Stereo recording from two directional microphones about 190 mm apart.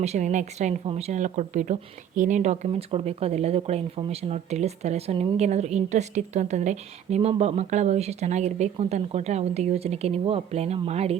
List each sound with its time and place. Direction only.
0.0 s speech: 35° right (ahead or behind)